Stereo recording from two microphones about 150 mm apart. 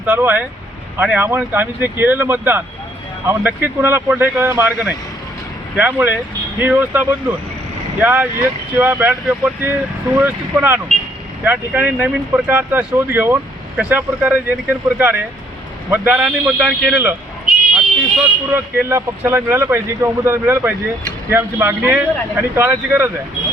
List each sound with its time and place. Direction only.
0.0 s speech: 15° right (ahead or behind)
18.5 s speech: 15° right (ahead or behind)